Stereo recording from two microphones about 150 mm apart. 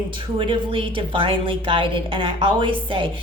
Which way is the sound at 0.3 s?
35° right (ahead or behind).